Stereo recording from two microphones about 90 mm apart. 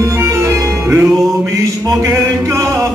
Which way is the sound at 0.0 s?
35° right (ahead or behind).